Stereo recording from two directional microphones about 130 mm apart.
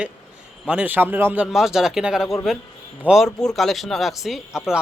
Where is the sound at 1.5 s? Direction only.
5° right (ahead or behind).